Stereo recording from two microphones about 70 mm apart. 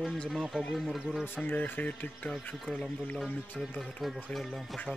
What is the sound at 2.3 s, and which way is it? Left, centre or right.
Speech, centre.